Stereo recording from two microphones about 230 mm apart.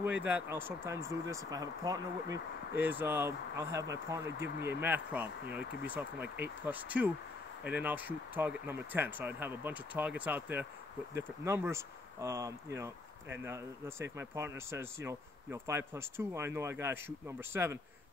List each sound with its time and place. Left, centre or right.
0.0 s speech: centre
4.6 s speech: right
4.8 s speech: centre
6.2 s speech: right
6.6 s speech: centre